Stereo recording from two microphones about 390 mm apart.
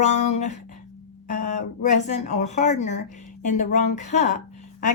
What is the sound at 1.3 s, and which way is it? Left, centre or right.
Speech, left.